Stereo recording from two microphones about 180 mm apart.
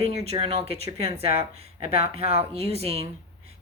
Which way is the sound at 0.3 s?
30° right (ahead or behind).